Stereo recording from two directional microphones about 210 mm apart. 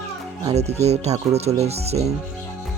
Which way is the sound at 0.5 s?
30° right (ahead or behind).